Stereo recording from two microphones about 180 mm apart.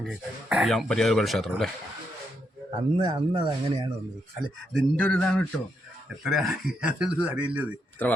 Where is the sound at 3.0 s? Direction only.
25° right (ahead or behind).